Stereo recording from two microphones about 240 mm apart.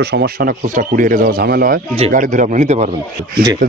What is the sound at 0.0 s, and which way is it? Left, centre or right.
Speech, right.